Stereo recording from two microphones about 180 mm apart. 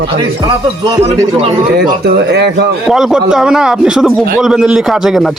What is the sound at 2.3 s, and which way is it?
Speech, 70° right (ahead or behind).